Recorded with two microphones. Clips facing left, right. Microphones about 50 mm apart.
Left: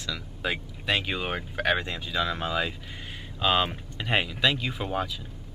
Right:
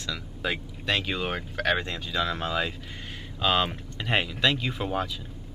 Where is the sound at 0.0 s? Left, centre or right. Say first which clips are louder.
Even; centre.